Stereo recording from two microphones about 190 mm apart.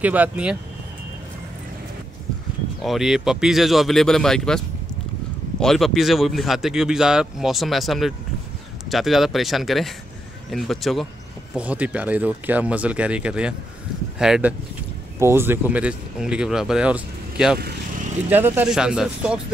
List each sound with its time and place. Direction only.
0.0 s speech: 10° right (ahead or behind)
2.8 s speech: centre (ahead or behind)
17.6 s vehicle: 55° right (ahead or behind)
18.3 s speech: 10° right (ahead or behind)